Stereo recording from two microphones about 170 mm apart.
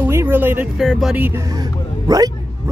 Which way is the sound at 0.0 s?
15° right (ahead or behind).